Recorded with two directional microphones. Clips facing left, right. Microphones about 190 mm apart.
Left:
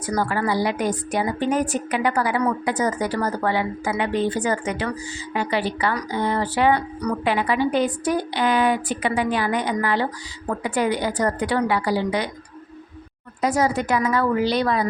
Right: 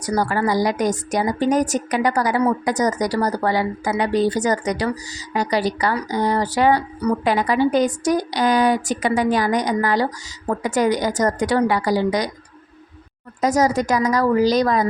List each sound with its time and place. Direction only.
0.0 s a woman's voice: 40° right (ahead or behind)
7.3 s a woman's voice: 40° right (ahead or behind)
13.4 s a woman's voice: 40° right (ahead or behind)